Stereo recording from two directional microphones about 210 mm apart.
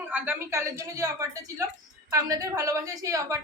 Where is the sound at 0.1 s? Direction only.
10° right (ahead or behind).